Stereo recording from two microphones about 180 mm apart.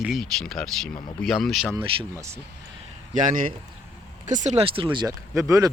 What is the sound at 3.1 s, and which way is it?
Speech, 45° right (ahead or behind).